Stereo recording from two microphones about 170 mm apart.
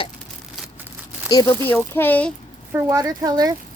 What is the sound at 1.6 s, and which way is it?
Speech, 10° left (ahead or behind).